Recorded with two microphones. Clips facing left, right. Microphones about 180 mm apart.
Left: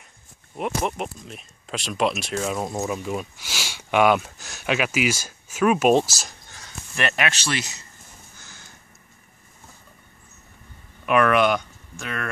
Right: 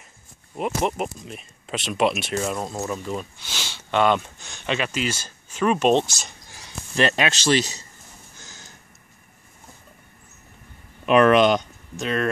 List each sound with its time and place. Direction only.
0.6 s speech: centre (ahead or behind)
2.6 s speech: 10° left (ahead or behind)
7.0 s speech: 25° right (ahead or behind)
11.1 s speech: 25° right (ahead or behind)